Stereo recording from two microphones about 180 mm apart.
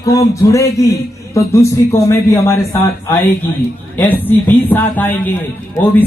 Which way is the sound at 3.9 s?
10° left (ahead or behind).